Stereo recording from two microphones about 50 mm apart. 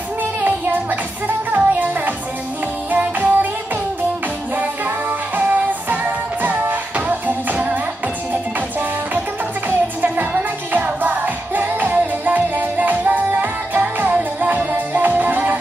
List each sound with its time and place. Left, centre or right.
0.4 s music: right
5.4 s music: right
9.7 s music: right